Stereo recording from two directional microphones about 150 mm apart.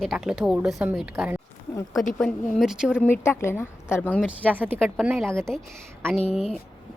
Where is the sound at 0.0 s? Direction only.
Centre (ahead or behind).